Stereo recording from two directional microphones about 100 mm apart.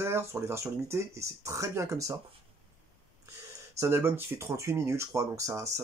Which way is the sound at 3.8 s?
25° right (ahead or behind).